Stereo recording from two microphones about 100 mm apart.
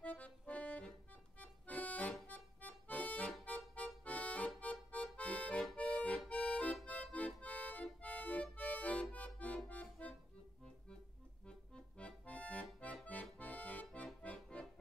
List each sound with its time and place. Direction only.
0.0 s accordion: 15° left (ahead or behind)
2.2 s music: 15° left (ahead or behind)
9.1 s accordion: 15° left (ahead or behind)
11.4 s accordion: 10° left (ahead or behind)